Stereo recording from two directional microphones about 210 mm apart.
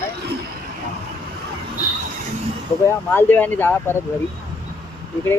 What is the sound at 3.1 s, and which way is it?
Speech, 10° left (ahead or behind).